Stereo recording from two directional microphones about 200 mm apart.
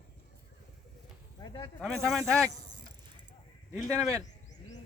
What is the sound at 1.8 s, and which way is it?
Speech, centre (ahead or behind).